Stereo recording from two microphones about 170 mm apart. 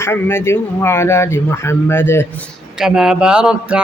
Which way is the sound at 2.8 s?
5° right (ahead or behind).